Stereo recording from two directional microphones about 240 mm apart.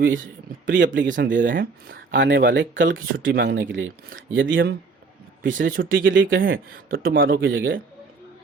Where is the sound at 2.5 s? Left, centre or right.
Right.